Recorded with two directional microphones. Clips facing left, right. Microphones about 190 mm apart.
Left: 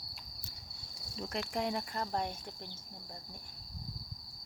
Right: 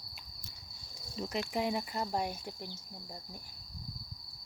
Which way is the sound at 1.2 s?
Centre (ahead or behind).